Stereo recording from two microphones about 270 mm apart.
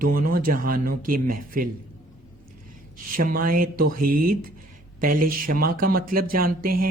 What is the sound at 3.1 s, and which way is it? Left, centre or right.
Speech, right.